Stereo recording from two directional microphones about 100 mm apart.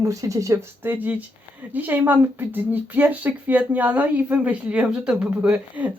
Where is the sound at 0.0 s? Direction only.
35° right (ahead or behind).